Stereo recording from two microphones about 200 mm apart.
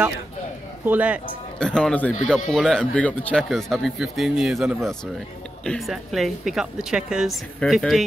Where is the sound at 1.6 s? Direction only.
5° left (ahead or behind).